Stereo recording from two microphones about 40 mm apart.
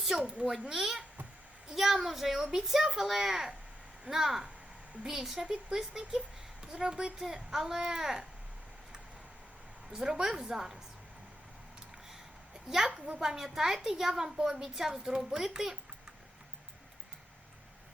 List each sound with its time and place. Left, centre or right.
0.2 s a woman's voice: right
0.7 s speech: centre
6.0 s a woman's voice: right
9.9 s speech: centre
12.6 s a woman's voice: centre